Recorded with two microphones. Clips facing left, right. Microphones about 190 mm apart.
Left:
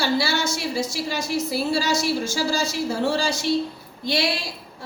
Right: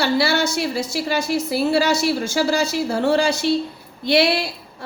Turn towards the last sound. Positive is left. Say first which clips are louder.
# right 7 dB
turn(degrees=-60)  # may be behind; listen again after turning